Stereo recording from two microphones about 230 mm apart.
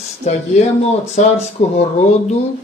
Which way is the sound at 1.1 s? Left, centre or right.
Left.